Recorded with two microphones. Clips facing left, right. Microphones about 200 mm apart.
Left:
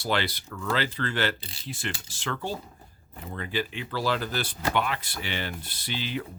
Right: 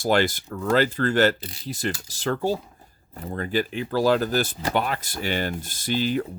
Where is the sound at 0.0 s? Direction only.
45° right (ahead or behind).